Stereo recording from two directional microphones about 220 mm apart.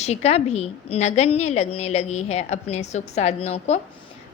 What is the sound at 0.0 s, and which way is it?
A woman's voice, 30° left (ahead or behind).